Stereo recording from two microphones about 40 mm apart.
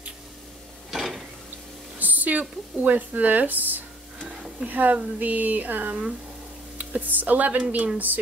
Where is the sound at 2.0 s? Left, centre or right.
Right.